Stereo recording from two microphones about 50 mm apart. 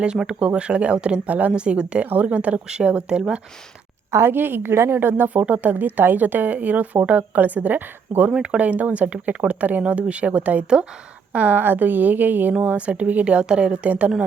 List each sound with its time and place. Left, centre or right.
0.3 s speech: right
4.1 s a woman's voice: right
5.3 s speech: right
11.6 s speech: right
12.6 s speech: right